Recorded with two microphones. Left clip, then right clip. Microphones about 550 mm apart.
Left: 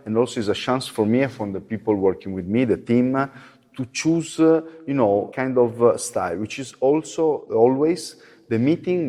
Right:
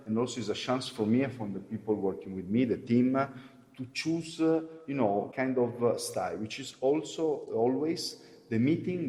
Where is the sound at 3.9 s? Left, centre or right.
Left.